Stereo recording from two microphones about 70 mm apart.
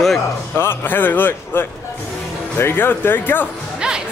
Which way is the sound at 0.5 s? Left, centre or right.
Left.